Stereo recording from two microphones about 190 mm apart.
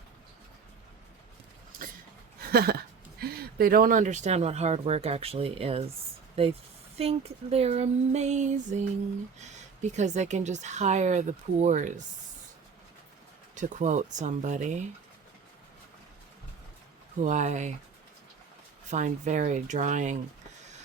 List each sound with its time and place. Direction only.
2.5 s speech: 55° right (ahead or behind); by 5.8 s 30° right (ahead or behind)
6.9 s speech: 30° right (ahead or behind)
13.6 s speech: 40° right (ahead or behind)
17.2 s speech: 40° right (ahead or behind)
18.9 s speech: 40° right (ahead or behind)